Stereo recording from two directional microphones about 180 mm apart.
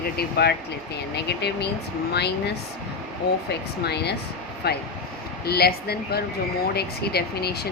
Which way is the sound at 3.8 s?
65° left (ahead or behind).